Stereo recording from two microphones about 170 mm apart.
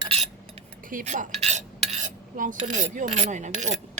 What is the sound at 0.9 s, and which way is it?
Speech, 50° right (ahead or behind).